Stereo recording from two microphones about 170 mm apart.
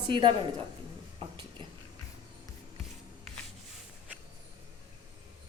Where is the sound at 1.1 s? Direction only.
25° right (ahead or behind).